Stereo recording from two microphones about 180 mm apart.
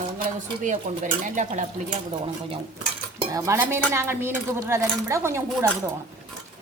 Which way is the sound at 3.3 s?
20° right (ahead or behind).